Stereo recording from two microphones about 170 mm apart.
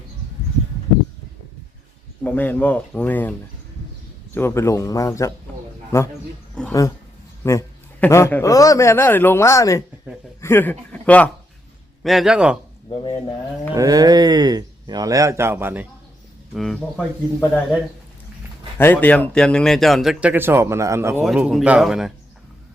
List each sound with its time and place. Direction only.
2.2 s speech: 10° left (ahead or behind)
4.4 s speech: 15° left (ahead or behind)
6.5 s a sound: 5° left (ahead or behind)
7.4 s a man's voice: 15° left (ahead or behind); by 12.5 s 5° right (ahead or behind)
12.9 s speech: 30° left (ahead or behind)
13.7 s speech: 20° right (ahead or behind)
16.6 s speech: centre (ahead or behind)
18.8 s speech: 10° left (ahead or behind); by 21.2 s 15° right (ahead or behind)
21.2 s speech: 5° right (ahead or behind)